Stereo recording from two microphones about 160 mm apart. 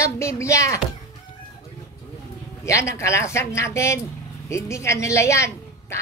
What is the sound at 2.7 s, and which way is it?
A woman's voice, 20° left (ahead or behind).